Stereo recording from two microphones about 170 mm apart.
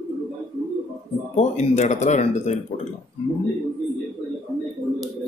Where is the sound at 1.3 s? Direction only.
40° left (ahead or behind).